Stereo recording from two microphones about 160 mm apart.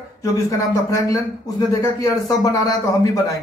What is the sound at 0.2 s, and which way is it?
A man's voice, 20° left (ahead or behind).